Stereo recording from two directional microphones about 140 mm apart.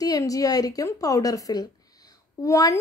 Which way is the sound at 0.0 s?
25° left (ahead or behind).